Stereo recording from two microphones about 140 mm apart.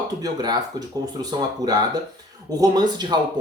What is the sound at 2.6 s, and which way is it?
Speech, 30° right (ahead or behind).